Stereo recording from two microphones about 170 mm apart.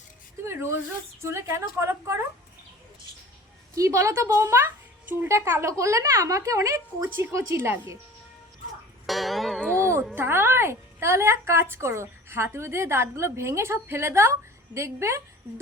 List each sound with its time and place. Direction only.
0.4 s a sound: 15° right (ahead or behind)
1.2 s speech: 15° right (ahead or behind)
3.8 s speech: 15° right (ahead or behind)
9.0 s speech: centre (ahead or behind)
9.8 s music: 15° right (ahead or behind)
10.2 s speech: 15° right (ahead or behind)